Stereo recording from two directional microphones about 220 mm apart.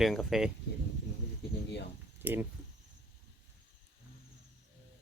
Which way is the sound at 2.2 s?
10° right (ahead or behind).